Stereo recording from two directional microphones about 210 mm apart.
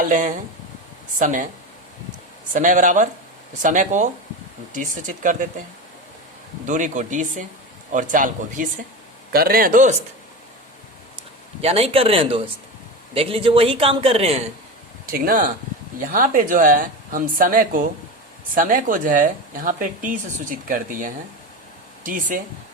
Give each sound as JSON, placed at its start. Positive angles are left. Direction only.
{"t": 0.0, "sound": "speech", "side_deg": -40}
{"t": 2.5, "sound": "speech", "side_deg": -40}
{"t": 6.7, "sound": "speech", "side_deg": -35}
{"t": 11.6, "sound": "a man's voice", "side_deg": -30}
{"t": 15.0, "sound": "speech", "side_deg": -45}